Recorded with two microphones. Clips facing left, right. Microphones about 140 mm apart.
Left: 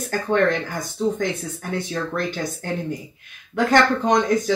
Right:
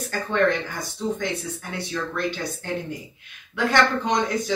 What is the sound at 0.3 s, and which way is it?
A woman's voice, 45° left (ahead or behind).